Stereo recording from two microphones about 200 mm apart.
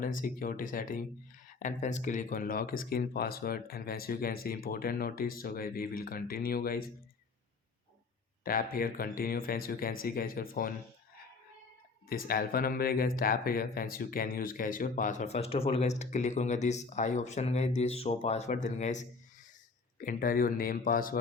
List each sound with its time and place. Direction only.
0.2 s speech: 45° left (ahead or behind)
8.4 s speech: 45° left (ahead or behind)
12.0 s speech: 45° left (ahead or behind)